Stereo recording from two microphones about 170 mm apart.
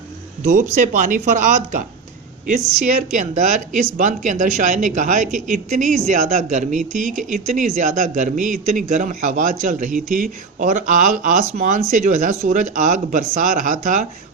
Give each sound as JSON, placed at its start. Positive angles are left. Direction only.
{"t": 0.4, "sound": "a man's voice", "side_deg": -50}